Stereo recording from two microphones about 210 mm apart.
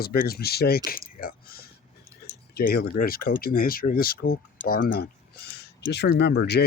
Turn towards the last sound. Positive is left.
turn(degrees=50)  # may be behind; listen again after turning